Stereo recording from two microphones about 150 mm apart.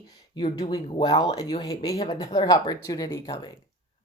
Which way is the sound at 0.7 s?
30° left (ahead or behind).